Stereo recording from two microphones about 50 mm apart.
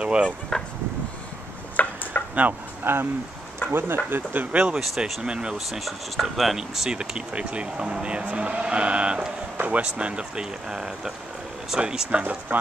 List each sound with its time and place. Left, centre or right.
0.0 s speech: right
0.5 s a sound: centre
1.8 s a sound: left
2.1 s a sound: left
2.8 s speech: right
4.7 s speech: centre
5.2 s speech: centre
5.7 s speech: centre
6.9 s speech: centre
12.1 s speech: right